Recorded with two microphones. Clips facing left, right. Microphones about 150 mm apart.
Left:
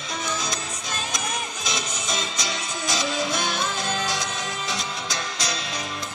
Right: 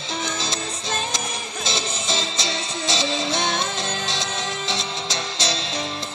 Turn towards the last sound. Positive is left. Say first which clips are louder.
# right 3 dB
turn(degrees=-25)  # may be behind; listen again after turning